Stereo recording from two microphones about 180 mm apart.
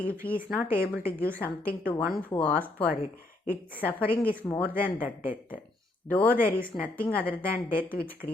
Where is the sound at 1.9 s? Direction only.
10° left (ahead or behind).